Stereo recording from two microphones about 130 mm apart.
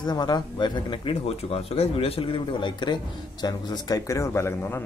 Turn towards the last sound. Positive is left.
turn(degrees=20)  # may be behind; listen again after turning